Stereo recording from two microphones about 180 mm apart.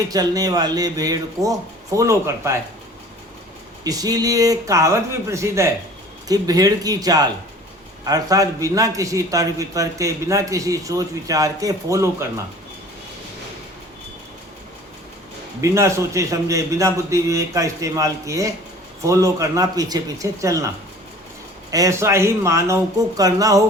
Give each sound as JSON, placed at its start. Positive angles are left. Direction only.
{"t": 0.1, "sound": "a man's voice", "side_deg": -20}
{"t": 3.8, "sound": "a man's voice", "side_deg": -20}
{"t": 15.6, "sound": "a man's voice", "side_deg": -15}
{"t": 21.7, "sound": "a man's voice", "side_deg": -20}